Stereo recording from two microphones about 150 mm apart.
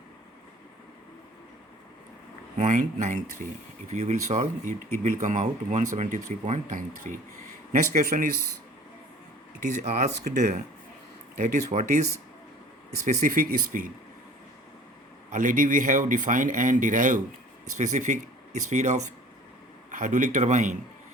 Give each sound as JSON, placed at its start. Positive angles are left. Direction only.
{"t": 2.6, "sound": "speech", "side_deg": -55}
{"t": 9.6, "sound": "speech", "side_deg": -50}
{"t": 11.3, "sound": "speech", "side_deg": -55}
{"t": 13.1, "sound": "speech", "side_deg": -65}
{"t": 15.3, "sound": "speech", "side_deg": -60}
{"t": 19.9, "sound": "speech", "side_deg": -60}